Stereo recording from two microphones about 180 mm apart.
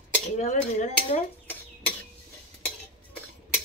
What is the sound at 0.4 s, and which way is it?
Speech, 40° left (ahead or behind).